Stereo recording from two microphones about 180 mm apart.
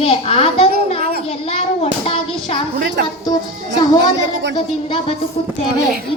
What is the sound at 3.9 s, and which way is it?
Speech, 85° right.